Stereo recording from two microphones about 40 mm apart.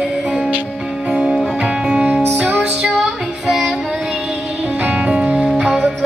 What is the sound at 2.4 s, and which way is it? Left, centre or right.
Music, right.